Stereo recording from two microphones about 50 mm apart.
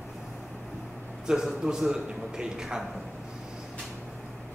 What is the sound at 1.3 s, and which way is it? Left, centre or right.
A man's voice, centre.